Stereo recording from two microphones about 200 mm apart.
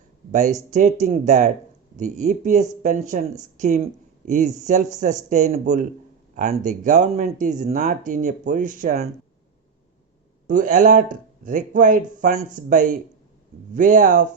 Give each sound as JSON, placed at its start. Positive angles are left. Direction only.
{"t": 0.3, "sound": "speech", "side_deg": -40}
{"t": 10.5, "sound": "speech", "side_deg": -40}